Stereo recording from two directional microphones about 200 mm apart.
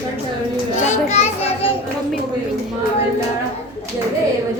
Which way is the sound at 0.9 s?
35° left (ahead or behind).